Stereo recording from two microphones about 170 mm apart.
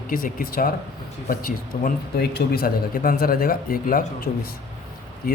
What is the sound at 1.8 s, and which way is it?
A man's voice, 70° left (ahead or behind).